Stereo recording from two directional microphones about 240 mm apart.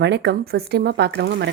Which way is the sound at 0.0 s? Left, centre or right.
Right.